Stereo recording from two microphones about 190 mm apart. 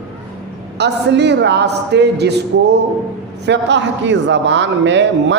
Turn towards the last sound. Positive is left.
turn(degrees=-70)  # may be behind; listen again after turning